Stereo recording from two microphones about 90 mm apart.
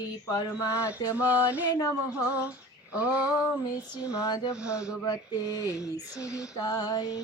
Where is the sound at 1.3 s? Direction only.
20° right (ahead or behind).